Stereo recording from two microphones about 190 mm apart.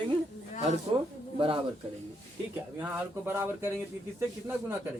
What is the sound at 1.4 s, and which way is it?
Speech, 25° right (ahead or behind).